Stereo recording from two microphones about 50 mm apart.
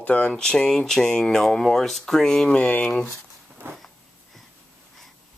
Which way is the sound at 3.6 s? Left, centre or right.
Right.